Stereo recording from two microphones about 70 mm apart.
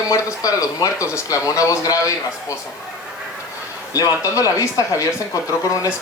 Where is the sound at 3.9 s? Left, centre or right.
Left.